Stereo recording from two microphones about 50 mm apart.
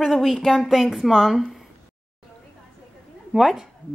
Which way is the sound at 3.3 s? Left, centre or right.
Centre.